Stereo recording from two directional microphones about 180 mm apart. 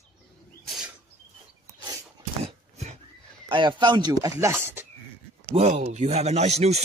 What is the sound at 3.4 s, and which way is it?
Speech, 25° right (ahead or behind).